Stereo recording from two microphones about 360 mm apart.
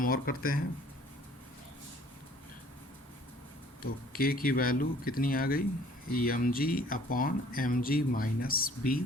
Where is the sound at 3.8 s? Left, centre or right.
Left.